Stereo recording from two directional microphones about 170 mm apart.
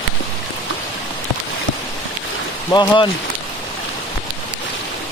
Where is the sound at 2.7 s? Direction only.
30° left (ahead or behind).